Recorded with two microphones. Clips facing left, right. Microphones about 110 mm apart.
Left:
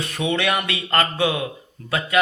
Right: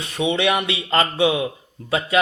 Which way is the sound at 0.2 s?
20° right (ahead or behind).